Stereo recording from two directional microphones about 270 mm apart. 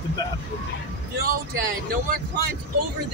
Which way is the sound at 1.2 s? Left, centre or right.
Right.